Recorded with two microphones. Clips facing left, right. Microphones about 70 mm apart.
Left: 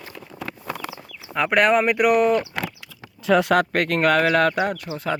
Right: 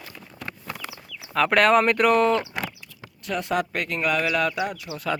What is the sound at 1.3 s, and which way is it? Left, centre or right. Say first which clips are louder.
Speech: even; centre.